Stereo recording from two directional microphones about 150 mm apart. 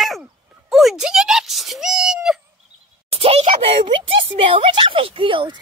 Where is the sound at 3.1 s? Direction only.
40° right (ahead or behind).